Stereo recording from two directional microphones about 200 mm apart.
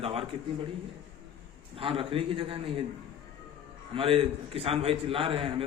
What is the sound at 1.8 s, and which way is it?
A man's voice, 25° right (ahead or behind).